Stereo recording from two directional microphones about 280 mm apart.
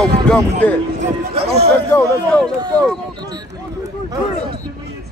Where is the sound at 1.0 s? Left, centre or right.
Right.